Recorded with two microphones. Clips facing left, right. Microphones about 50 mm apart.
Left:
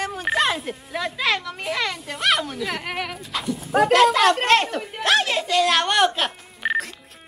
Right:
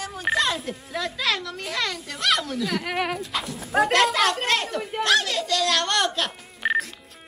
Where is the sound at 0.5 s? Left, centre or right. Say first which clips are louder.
Left 2 dB; centre.